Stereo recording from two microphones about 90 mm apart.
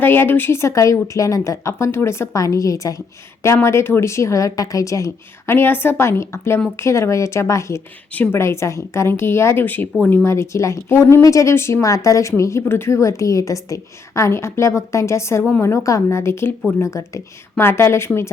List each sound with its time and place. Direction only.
0.0 s speech: 25° left (ahead or behind)
5.5 s speech: 25° left (ahead or behind)
8.1 s speech: 20° left (ahead or behind)
8.4 s speech: 30° left (ahead or behind)
10.2 s speech: 30° left (ahead or behind)